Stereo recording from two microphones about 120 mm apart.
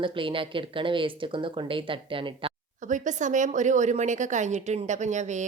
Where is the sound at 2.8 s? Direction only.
90° right.